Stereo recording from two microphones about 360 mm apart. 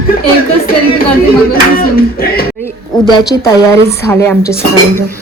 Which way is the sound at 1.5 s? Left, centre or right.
Left.